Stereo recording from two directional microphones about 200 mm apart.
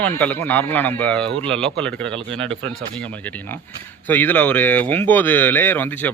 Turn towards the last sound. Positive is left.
turn(degrees=10)  # may be behind; listen again after turning